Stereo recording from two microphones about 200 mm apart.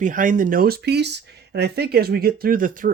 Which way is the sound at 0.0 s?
40° right (ahead or behind).